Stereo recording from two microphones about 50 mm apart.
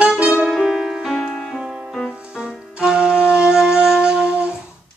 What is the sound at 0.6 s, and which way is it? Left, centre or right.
Music, centre.